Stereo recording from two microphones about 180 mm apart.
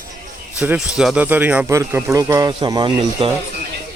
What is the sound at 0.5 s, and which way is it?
Speech, 5° right (ahead or behind).